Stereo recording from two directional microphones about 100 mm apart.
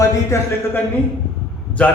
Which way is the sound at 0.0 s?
30° left (ahead or behind).